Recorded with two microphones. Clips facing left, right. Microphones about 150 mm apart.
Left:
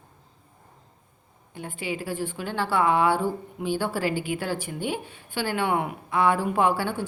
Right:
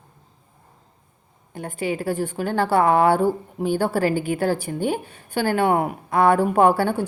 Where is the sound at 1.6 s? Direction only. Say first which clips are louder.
Right 6 dB; 45° right (ahead or behind).